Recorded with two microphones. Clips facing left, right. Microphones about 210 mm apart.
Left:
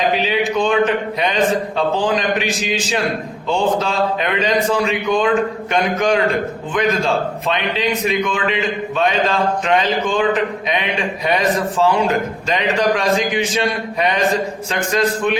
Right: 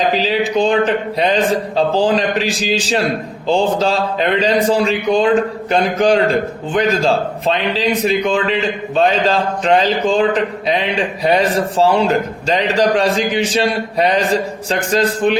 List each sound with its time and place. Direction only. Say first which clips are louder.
0.1 s a man's voice: right 2 dB; 35° right (ahead or behind)